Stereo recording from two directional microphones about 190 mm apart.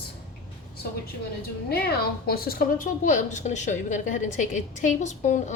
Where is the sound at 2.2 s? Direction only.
50° left (ahead or behind).